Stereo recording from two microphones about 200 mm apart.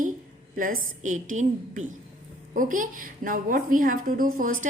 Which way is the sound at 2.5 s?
40° right (ahead or behind).